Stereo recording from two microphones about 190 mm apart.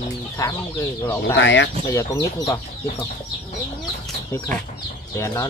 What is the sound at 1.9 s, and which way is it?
Speech, 15° left (ahead or behind).